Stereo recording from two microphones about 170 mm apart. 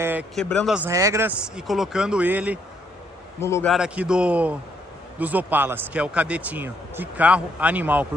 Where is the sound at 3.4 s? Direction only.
15° left (ahead or behind).